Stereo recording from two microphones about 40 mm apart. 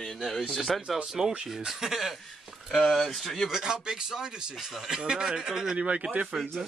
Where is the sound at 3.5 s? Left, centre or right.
Centre.